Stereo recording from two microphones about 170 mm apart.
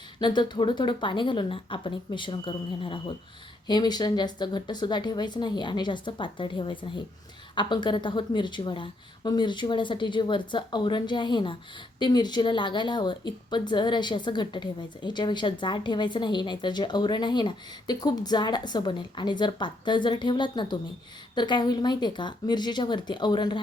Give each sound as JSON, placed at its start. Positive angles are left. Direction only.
{"t": 0.2, "sound": "speech", "side_deg": 25}